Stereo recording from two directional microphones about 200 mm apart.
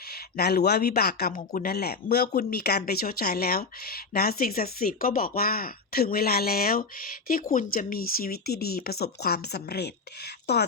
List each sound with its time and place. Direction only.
0.1 s speech: 50° left (ahead or behind)